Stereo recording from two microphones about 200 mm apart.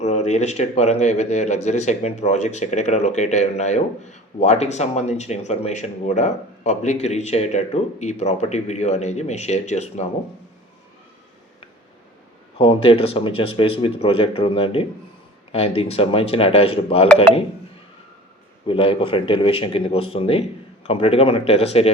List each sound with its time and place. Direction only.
0.0 s speech: 35° left (ahead or behind)
12.5 s speech: 25° left (ahead or behind)
18.7 s speech: 25° left (ahead or behind)